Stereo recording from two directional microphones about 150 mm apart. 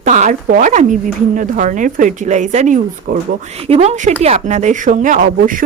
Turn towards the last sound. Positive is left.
turn(degrees=-65)  # may be behind; listen again after turning